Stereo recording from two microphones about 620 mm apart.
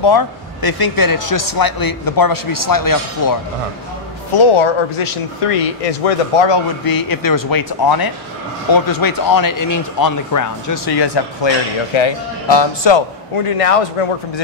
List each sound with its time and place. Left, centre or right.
0.0 s speech: left
4.4 s speech: left
6.5 s speech: left